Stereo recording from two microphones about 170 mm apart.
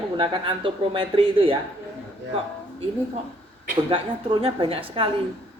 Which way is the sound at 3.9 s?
30° right (ahead or behind).